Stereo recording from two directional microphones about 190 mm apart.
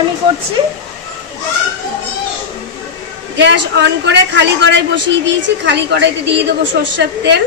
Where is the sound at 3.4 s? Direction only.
70° right (ahead or behind).